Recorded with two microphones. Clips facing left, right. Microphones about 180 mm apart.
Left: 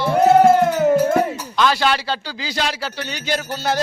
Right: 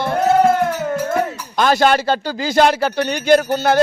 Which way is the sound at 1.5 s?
45° right (ahead or behind).